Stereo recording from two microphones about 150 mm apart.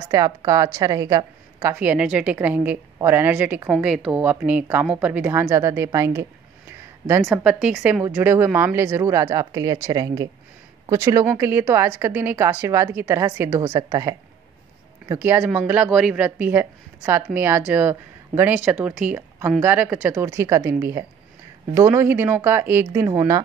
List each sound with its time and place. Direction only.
0.1 s a woman's voice: 25° right (ahead or behind)
1.8 s a woman's voice: 10° right (ahead or behind)
7.4 s a woman's voice: 5° right (ahead or behind); by 14.1 s 25° right (ahead or behind)
15.1 s a woman's voice: 15° right (ahead or behind)
21.7 s a woman's voice: 15° right (ahead or behind)